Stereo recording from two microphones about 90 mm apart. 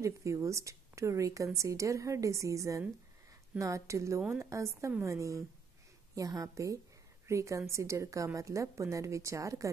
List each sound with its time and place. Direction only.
0.0 s a woman's voice: 35° right (ahead or behind)